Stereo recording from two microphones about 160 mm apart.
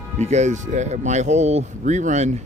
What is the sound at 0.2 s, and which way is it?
Speech, 45° right (ahead or behind).